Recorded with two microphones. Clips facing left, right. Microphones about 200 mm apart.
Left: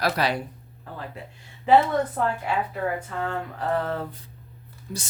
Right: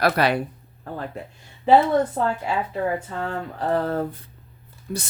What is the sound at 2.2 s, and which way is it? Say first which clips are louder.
Speech: right 2 dB; 25° right (ahead or behind).